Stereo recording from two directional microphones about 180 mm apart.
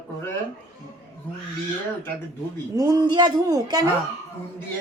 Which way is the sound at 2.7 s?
20° right (ahead or behind).